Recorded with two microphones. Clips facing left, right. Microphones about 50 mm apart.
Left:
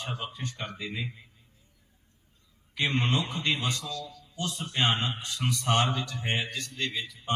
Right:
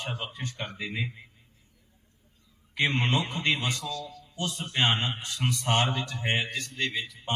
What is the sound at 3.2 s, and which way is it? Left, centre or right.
A man's voice, right.